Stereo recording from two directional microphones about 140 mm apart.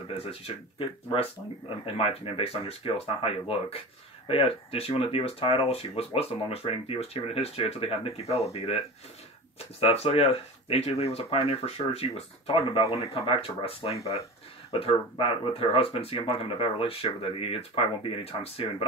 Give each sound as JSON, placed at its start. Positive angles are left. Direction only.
{"t": 0.1, "sound": "speech", "side_deg": 45}
{"t": 9.8, "sound": "speech", "side_deg": 45}